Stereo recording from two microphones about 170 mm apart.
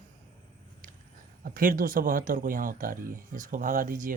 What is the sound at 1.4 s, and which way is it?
Speech, 55° right (ahead or behind).